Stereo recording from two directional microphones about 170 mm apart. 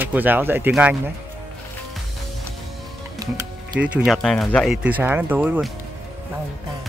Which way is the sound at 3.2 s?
20° right (ahead or behind).